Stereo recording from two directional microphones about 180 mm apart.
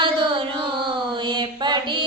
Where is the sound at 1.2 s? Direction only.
25° right (ahead or behind).